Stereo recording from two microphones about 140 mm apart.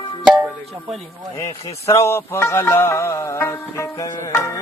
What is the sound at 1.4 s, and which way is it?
Speech, 20° left (ahead or behind).